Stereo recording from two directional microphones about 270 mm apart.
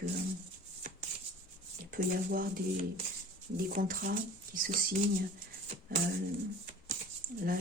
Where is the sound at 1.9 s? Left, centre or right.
Right.